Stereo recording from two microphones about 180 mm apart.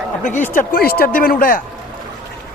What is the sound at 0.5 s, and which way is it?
Speech, 50° left (ahead or behind).